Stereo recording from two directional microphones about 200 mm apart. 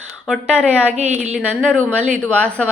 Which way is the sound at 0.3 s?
5° right (ahead or behind).